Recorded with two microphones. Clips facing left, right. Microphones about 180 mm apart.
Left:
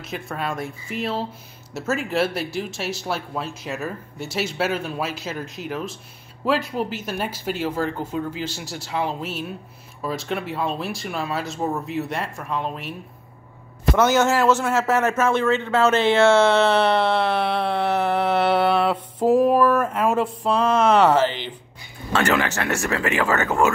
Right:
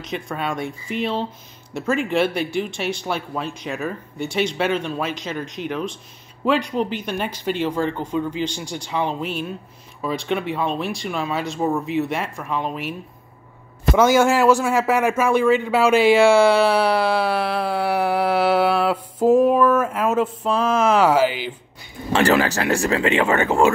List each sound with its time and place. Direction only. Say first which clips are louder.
0.0 s speech: right 2 dB; 5° left (ahead or behind)
13.9 s a man's voice: right 3 dB; 10° right (ahead or behind)
22.1 s speech: right 4 dB; 30° right (ahead or behind)